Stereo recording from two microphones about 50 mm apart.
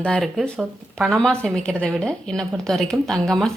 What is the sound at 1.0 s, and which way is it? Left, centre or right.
A woman's voice, centre.